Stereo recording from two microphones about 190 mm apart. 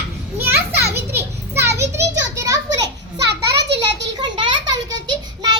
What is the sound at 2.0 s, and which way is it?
Children playing, 65° right (ahead or behind).